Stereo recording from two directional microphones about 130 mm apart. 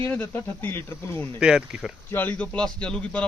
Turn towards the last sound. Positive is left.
turn(degrees=5)  # may be behind; listen again after turning